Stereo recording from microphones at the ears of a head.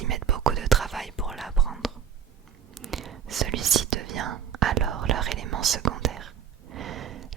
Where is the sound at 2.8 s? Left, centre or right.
Right.